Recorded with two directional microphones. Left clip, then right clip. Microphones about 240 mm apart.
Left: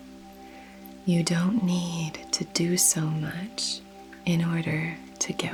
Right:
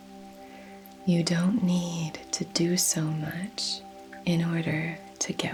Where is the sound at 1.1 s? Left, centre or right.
Left.